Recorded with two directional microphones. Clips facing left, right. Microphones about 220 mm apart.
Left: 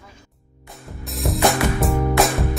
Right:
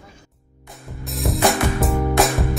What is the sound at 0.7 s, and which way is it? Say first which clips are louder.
Music: right 1 dB; centre (ahead or behind).